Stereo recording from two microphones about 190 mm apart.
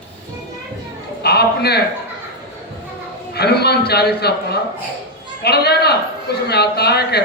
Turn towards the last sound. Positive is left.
turn(degrees=60)  # may be behind; listen again after turning